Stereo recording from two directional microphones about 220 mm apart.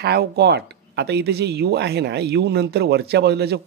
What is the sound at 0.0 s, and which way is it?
Speech, 45° right (ahead or behind).